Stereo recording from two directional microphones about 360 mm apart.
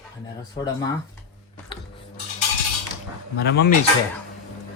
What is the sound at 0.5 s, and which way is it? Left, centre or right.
Speech, centre.